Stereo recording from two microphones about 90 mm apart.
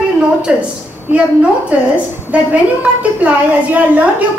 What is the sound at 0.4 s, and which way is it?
Speech, 10° right (ahead or behind).